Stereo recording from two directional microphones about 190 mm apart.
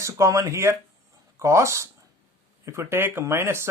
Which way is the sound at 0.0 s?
15° right (ahead or behind).